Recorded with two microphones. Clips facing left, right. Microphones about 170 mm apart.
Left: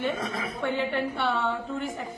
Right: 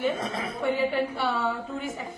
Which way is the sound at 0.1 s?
25° right (ahead or behind).